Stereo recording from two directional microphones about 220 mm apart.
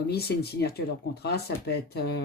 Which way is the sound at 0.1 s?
45° left (ahead or behind).